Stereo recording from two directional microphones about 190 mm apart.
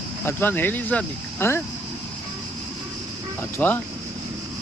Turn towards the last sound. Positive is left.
turn(degrees=10)  # may be behind; listen again after turning